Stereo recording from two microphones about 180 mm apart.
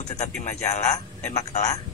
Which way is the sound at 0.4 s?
40° left (ahead or behind).